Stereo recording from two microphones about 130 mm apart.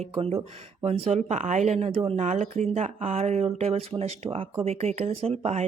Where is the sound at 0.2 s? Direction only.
50° right (ahead or behind).